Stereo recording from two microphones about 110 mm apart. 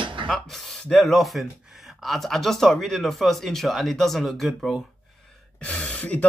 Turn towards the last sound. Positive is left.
turn(degrees=10)  # may be behind; listen again after turning